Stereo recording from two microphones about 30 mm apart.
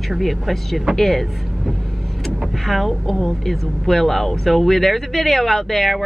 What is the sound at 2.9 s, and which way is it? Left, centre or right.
Speech, centre.